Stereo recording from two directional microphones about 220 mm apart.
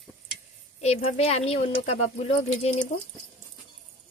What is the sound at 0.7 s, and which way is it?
A woman's voice, 30° left (ahead or behind).